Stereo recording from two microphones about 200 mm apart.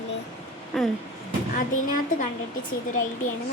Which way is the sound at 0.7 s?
Centre (ahead or behind).